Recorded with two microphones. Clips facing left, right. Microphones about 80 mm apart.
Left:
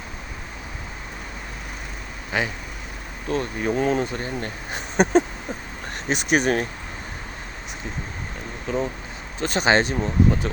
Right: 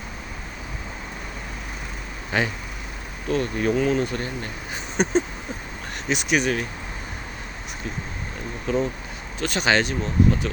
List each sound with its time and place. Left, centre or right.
2.3 s speech: centre
3.3 s speech: left
4.0 s speech: left
5.0 s a sound: left
6.1 s speech: left
8.6 s speech: centre
9.4 s speech: left